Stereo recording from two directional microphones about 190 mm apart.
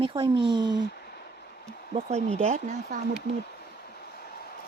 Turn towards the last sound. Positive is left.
turn(degrees=55)  # may be behind; listen again after turning